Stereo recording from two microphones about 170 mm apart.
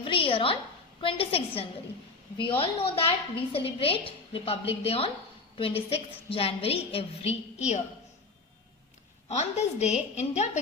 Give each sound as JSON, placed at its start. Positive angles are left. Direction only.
{"t": 0.0, "sound": "a sound", "side_deg": 30}
{"t": 1.0, "sound": "a woman's voice", "side_deg": 35}
{"t": 9.3, "sound": "a woman's voice", "side_deg": 40}